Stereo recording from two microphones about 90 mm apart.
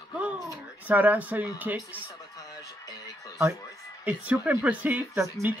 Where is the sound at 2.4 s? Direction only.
45° left (ahead or behind).